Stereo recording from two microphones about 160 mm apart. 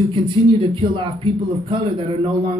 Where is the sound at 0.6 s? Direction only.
35° right (ahead or behind).